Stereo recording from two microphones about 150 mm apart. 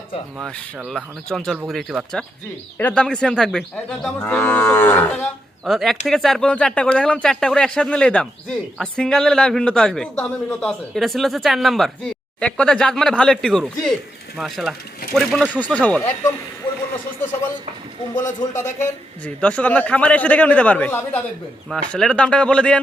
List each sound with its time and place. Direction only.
0.9 s a man's voice: 5° left (ahead or behind)
5.2 s a man's voice: centre (ahead or behind)
18.8 s a man's voice: 10° left (ahead or behind)